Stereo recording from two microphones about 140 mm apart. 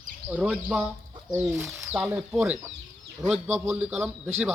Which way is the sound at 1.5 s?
15° right (ahead or behind).